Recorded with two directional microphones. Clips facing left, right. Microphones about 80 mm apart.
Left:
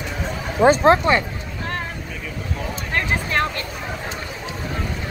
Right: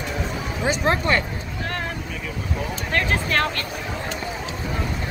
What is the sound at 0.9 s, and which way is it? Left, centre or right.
Speech, centre.